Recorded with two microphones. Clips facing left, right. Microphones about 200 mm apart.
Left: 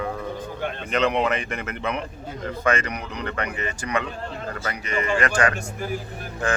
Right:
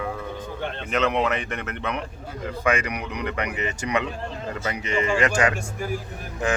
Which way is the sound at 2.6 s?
10° right (ahead or behind).